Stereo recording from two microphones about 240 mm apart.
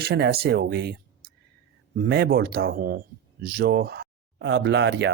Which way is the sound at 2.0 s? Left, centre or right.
Right.